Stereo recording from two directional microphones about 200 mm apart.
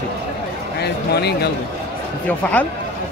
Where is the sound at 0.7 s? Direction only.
55° left (ahead or behind).